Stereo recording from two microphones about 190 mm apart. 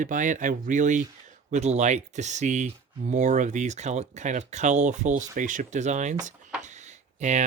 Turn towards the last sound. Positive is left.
turn(degrees=-40)  # may be behind; listen again after turning